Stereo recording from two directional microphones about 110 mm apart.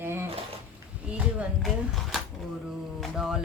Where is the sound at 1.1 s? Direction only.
10° right (ahead or behind).